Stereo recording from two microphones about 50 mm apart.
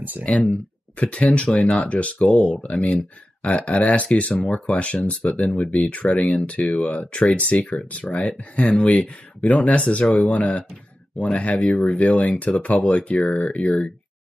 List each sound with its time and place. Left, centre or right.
0.2 s speech: left